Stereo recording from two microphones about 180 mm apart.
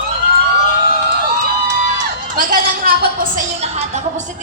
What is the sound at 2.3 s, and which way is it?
A woman's voice, 55° right (ahead or behind).